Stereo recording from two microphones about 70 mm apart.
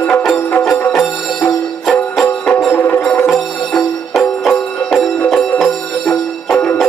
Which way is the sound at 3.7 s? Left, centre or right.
Centre.